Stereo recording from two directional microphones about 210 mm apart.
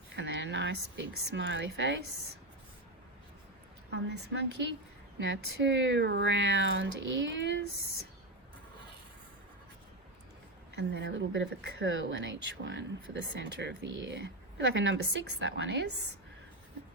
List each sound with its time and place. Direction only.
0.2 s speech: 60° right (ahead or behind)
3.9 s a woman's voice: 55° right (ahead or behind)
10.8 s a woman's voice: 55° right (ahead or behind)